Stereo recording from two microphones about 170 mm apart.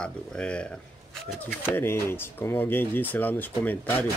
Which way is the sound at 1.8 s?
15° left (ahead or behind).